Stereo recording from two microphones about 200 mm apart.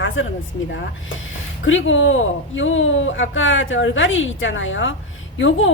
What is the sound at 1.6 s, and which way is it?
Speech, 75° left (ahead or behind).